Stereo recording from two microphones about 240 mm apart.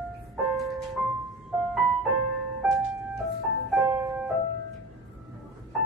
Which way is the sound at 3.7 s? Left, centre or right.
Centre.